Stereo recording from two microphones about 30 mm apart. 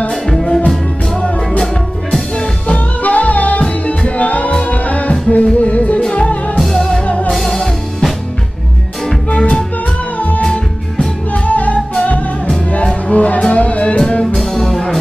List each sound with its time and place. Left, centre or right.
0.3 s music: centre
3.0 s music: left
6.6 s music: centre
9.3 s music: left
10.1 s music: left
13.1 s music: left
14.4 s music: centre